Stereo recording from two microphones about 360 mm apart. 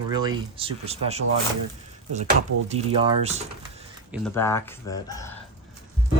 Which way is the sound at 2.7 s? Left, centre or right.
Centre.